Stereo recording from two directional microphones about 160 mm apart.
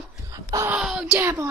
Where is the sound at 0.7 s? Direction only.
5° right (ahead or behind).